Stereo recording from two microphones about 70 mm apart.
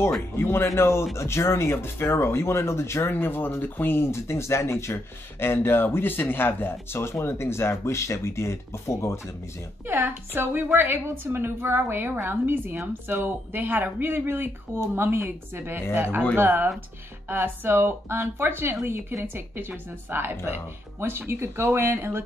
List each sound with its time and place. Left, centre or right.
0.4 s speech: left
9.8 s speech: right